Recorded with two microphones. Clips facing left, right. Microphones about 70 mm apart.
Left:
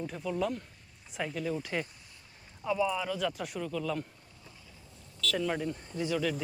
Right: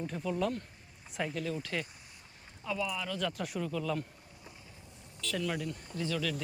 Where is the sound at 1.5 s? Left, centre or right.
Centre.